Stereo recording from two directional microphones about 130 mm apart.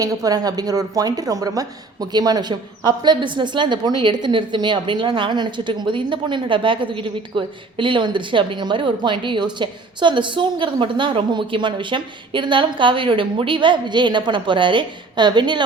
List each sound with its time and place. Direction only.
0.0 s a woman's voice: 30° right (ahead or behind)